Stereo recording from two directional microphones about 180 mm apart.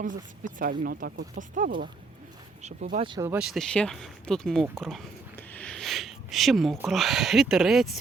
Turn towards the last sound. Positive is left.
turn(degrees=0)  # may be behind; listen again after turning